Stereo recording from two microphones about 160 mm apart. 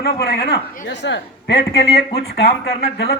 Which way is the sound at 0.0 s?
75° left (ahead or behind).